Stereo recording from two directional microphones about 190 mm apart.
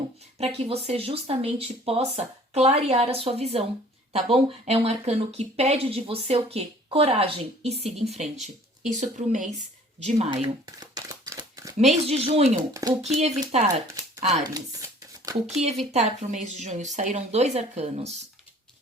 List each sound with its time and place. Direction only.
0.3 s speech: 30° right (ahead or behind)
10.8 s crumpling: 20° right (ahead or behind)
11.8 s speech: 35° right (ahead or behind)
14.4 s speech: 20° right (ahead or behind)
15.9 s speech: 35° right (ahead or behind)